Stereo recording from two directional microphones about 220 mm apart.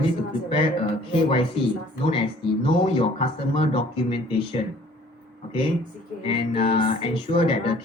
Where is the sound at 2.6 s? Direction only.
25° left (ahead or behind).